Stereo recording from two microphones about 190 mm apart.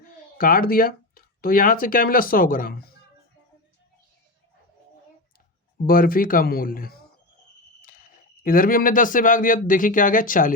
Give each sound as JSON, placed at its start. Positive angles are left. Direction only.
{"t": 0.3, "sound": "speech", "side_deg": 50}
{"t": 5.8, "sound": "speech", "side_deg": 50}
{"t": 7.8, "sound": "cricket", "side_deg": 45}
{"t": 8.4, "sound": "speech", "side_deg": 45}